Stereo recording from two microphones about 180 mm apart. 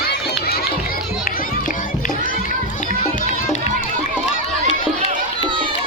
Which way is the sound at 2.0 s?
50° left (ahead or behind).